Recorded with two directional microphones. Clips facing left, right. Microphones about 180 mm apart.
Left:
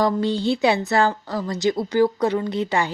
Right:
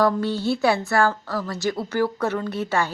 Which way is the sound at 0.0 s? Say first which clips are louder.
Left 1 dB; 15° left (ahead or behind).